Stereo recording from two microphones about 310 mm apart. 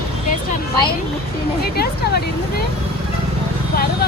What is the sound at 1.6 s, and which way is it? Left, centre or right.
Speech, left.